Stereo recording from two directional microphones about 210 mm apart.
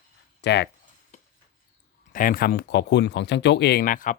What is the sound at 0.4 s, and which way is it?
Speech, 55° left (ahead or behind).